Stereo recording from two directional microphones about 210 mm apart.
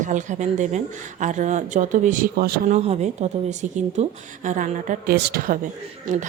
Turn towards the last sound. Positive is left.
turn(degrees=-40)  # may be behind; listen again after turning